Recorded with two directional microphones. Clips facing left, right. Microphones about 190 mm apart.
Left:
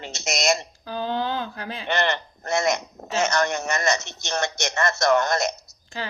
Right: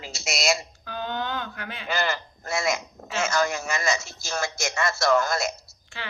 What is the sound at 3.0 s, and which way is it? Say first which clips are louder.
Speech: left 4 dB; 40° left (ahead or behind).